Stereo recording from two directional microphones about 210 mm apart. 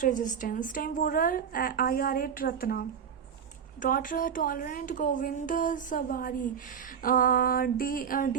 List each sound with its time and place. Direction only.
0.0 s a woman's voice: 40° left (ahead or behind)